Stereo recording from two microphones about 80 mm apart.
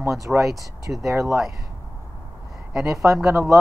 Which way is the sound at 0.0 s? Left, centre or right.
Right.